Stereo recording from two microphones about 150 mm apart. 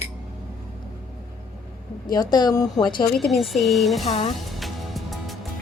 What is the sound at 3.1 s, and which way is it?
Speech, centre (ahead or behind).